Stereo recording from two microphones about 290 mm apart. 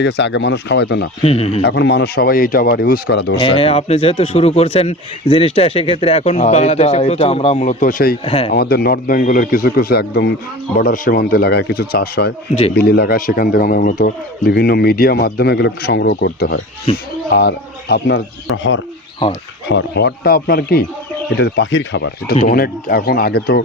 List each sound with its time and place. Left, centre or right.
0.0 s speech: left
1.2 s speech: left
1.6 s speech: left
3.3 s speech: centre
8.2 s speech: centre
8.5 s speech: left
16.9 s speech: centre
17.3 s speech: left